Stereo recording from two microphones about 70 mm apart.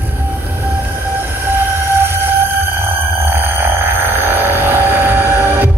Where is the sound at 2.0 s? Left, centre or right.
Right.